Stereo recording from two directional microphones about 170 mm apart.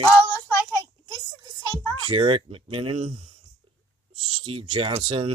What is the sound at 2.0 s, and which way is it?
Speech, 30° right (ahead or behind).